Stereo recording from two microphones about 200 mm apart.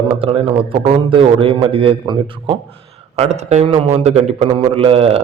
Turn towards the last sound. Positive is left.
turn(degrees=-30)  # may be behind; listen again after turning